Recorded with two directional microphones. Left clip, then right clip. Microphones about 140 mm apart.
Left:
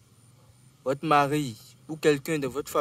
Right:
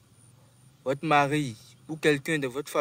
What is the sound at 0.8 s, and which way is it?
Speech, 20° left (ahead or behind).